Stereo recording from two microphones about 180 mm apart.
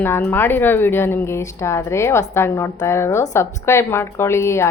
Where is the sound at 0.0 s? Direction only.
10° left (ahead or behind).